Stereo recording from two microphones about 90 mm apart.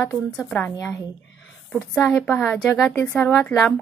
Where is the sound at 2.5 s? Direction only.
Centre (ahead or behind).